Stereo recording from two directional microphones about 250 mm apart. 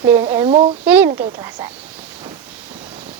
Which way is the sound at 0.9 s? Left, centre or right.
Centre.